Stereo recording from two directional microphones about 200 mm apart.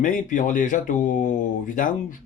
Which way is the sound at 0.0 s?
40° left (ahead or behind).